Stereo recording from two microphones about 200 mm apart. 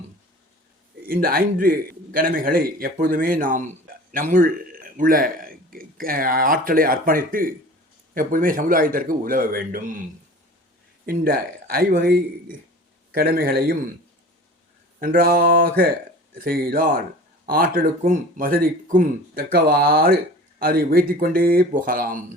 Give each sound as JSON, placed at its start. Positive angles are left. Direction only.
{"t": 1.0, "sound": "a man's voice", "side_deg": -45}
{"t": 11.0, "sound": "speech", "side_deg": -45}
{"t": 15.0, "sound": "speech", "side_deg": -45}